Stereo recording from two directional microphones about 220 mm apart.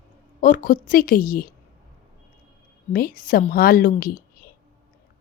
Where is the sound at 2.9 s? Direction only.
40° left (ahead or behind).